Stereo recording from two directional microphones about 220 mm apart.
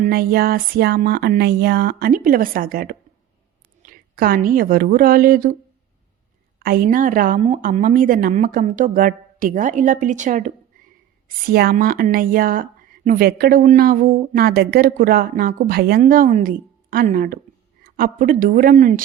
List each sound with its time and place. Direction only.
0.0 s a woman's voice: 45° right (ahead or behind)
6.6 s speech: 40° right (ahead or behind)